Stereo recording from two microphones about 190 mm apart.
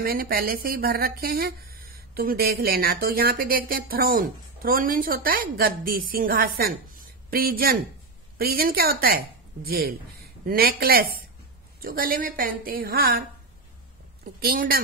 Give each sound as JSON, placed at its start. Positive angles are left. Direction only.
{"t": 0.0, "sound": "speech", "side_deg": -50}
{"t": 14.4, "sound": "speech", "side_deg": -50}